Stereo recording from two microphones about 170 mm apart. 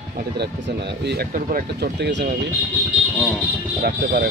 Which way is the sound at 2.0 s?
85° right.